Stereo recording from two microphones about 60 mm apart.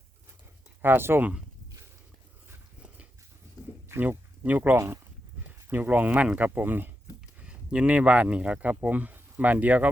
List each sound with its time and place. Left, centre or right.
0.8 s speech: right
4.4 s speech: right
6.5 s speech: right
7.3 s speech: centre